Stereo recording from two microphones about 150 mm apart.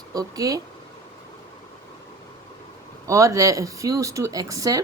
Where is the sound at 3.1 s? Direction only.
20° right (ahead or behind).